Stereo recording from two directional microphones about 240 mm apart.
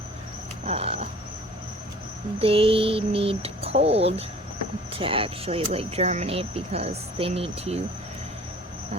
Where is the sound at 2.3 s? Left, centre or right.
Right.